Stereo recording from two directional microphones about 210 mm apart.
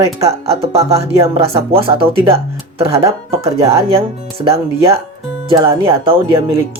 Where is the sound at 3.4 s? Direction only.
30° right (ahead or behind).